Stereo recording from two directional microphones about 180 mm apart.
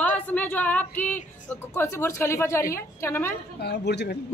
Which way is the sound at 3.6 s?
70° left (ahead or behind).